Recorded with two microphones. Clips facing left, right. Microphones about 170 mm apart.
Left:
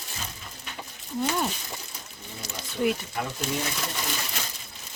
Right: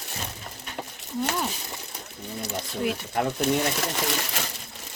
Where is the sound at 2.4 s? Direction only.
60° right (ahead or behind).